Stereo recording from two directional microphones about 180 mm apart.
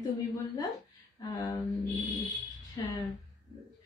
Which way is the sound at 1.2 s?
20° left (ahead or behind).